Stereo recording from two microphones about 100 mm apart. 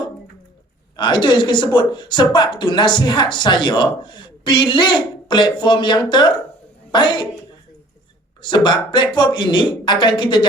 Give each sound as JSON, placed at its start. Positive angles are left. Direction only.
{"t": 0.9, "sound": "a woman's voice", "side_deg": 50}
{"t": 8.4, "sound": "a woman's voice", "side_deg": 50}